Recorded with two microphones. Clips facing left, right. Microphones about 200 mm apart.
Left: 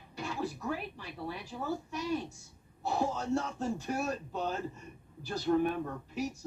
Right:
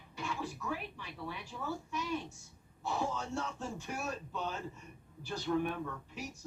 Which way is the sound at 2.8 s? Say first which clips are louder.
Left 4 dB; 35° left (ahead or behind).